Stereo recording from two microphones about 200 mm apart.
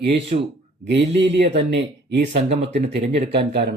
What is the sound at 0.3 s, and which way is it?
Speech, 40° right (ahead or behind).